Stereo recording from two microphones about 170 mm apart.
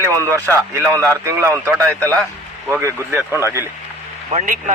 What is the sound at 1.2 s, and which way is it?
Speech, 15° right (ahead or behind).